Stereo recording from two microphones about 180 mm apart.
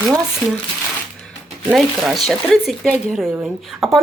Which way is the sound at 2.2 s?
Centre (ahead or behind).